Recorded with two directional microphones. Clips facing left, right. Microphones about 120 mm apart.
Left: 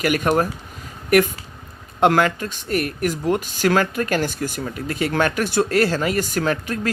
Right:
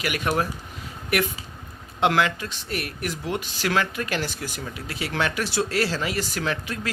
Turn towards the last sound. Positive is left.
turn(degrees=45)  # may be behind; listen again after turning